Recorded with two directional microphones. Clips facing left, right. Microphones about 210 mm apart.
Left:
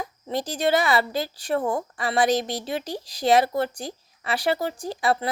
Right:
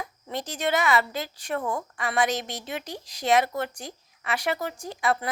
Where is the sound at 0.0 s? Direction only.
35° left (ahead or behind).